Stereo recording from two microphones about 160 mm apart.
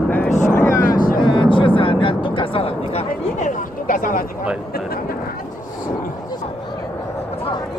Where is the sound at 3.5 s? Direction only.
60° left (ahead or behind).